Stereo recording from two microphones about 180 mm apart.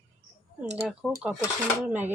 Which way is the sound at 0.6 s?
5° right (ahead or behind).